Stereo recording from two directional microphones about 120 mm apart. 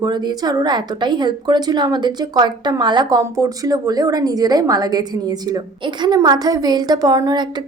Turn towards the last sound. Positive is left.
turn(degrees=-35)  # may be behind; listen again after turning